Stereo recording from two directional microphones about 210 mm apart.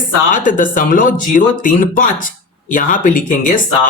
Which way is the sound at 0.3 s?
40° left (ahead or behind).